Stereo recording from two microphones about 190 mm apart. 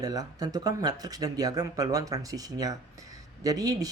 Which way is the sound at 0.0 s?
20° right (ahead or behind).